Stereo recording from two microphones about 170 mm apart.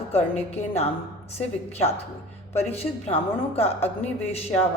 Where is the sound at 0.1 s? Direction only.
40° left (ahead or behind).